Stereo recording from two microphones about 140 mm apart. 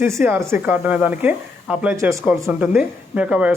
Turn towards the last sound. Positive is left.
turn(degrees=-10)  # may be behind; listen again after turning